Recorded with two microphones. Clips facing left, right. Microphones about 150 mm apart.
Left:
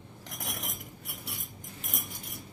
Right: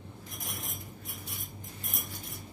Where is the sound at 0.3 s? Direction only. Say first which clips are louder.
Left 3 dB; 85° left.